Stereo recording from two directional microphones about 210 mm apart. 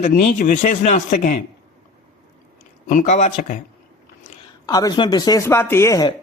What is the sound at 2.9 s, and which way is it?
Speech, 35° left (ahead or behind).